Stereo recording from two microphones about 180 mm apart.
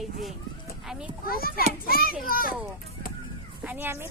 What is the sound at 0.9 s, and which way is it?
Speech, 5° right (ahead or behind).